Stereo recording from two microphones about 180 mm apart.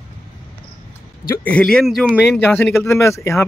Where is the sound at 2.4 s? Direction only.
10° left (ahead or behind).